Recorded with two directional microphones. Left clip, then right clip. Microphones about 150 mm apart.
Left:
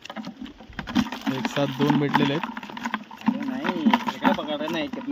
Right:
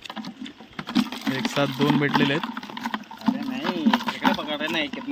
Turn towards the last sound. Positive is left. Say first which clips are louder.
# right 2 dB
turn(degrees=40)  # may be behind; listen again after turning